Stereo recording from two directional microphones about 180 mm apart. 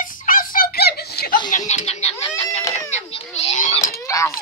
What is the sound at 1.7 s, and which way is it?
A woman's voice, 40° left (ahead or behind).